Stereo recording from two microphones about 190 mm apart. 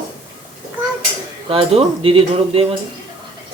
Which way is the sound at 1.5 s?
30° right (ahead or behind).